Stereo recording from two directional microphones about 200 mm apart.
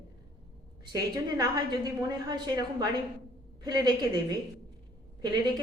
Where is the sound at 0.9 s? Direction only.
20° right (ahead or behind).